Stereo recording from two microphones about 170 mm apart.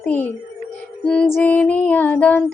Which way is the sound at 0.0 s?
10° left (ahead or behind).